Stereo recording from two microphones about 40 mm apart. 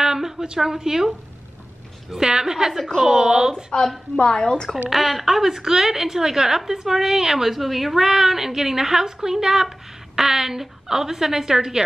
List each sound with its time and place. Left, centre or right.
0.0 s a woman's voice: centre
4.2 s a woman's voice: centre
4.8 s a woman's voice: centre